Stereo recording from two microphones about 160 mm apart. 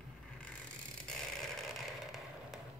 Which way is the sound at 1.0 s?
5° left (ahead or behind).